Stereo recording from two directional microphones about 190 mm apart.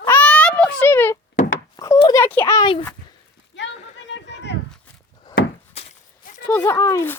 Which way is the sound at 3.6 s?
70° left (ahead or behind).